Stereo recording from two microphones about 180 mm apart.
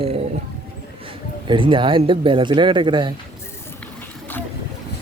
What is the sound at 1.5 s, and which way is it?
Speech, 30° right (ahead or behind).